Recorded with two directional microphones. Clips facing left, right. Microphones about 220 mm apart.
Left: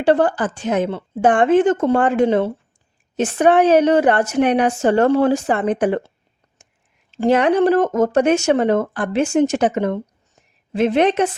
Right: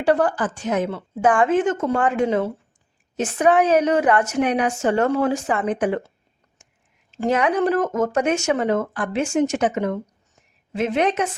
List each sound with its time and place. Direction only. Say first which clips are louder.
0.0 s a woman's voice: left 3 dB; 30° left (ahead or behind)
7.2 s a woman's voice: left 5 dB; 30° left (ahead or behind)